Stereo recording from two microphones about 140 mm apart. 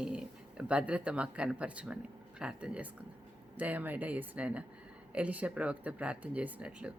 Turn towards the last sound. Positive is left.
turn(degrees=-10)  # may be behind; listen again after turning